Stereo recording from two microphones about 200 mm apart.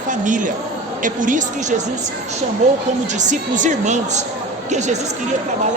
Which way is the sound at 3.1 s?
35° right (ahead or behind).